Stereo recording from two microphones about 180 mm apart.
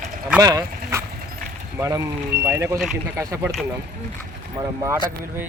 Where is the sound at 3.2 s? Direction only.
15° right (ahead or behind).